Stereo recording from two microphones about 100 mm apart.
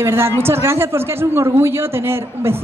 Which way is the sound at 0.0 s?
25° right (ahead or behind).